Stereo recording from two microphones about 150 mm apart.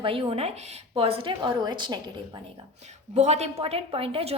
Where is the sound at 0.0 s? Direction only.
35° right (ahead or behind).